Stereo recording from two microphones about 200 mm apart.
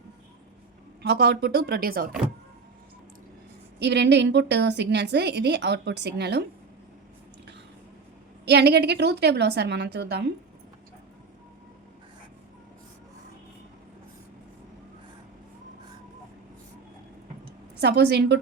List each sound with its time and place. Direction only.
1.0 s speech: 55° right (ahead or behind)
3.8 s a woman's voice: 55° right (ahead or behind)
8.4 s a woman's voice: 55° right (ahead or behind)
17.7 s a woman's voice: 55° right (ahead or behind)